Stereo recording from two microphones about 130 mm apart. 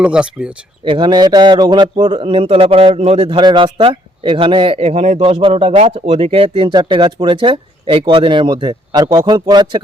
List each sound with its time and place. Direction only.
0.0 s speech: 10° right (ahead or behind)
0.9 s speech: 40° right (ahead or behind)